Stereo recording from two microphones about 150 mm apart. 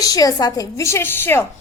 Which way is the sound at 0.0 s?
25° left (ahead or behind).